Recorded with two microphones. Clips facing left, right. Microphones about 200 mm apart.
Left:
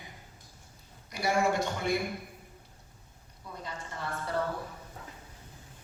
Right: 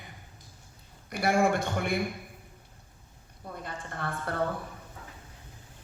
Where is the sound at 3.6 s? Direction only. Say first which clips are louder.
Right 2 dB; 55° right (ahead or behind).